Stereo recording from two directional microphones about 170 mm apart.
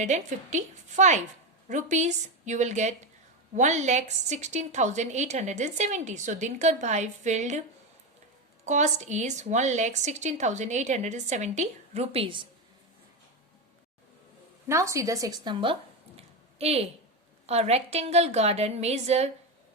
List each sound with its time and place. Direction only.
0.0 s a woman's voice: 45° right (ahead or behind)
8.6 s a woman's voice: 45° right (ahead or behind)
14.7 s a woman's voice: 15° right (ahead or behind); by 19.3 s 40° right (ahead or behind)